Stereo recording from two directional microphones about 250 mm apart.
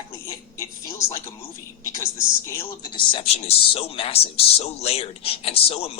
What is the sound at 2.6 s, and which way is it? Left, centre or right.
A man's voice, centre.